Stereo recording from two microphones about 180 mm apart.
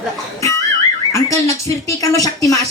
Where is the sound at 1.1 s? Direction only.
15° left (ahead or behind).